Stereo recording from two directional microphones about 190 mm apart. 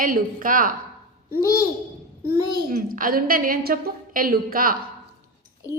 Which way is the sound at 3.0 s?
50° right (ahead or behind).